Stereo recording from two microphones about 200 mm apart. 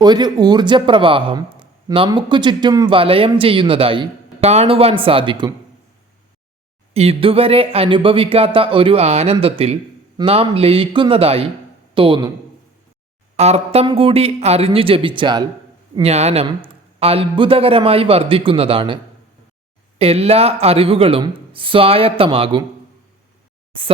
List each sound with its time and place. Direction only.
0.0 s speech: 20° right (ahead or behind)
6.9 s speech: 30° right (ahead or behind)
13.3 s speech: 35° right (ahead or behind)
20.0 s speech: 30° right (ahead or behind)